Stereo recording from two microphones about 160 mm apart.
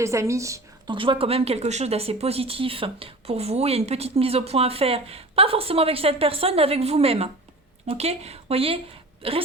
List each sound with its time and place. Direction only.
0.0 s a woman's voice: 20° right (ahead or behind)
0.9 s a woman's voice: 30° right (ahead or behind)